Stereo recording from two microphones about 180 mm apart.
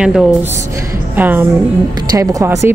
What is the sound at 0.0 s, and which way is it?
A woman's voice, 5° right (ahead or behind).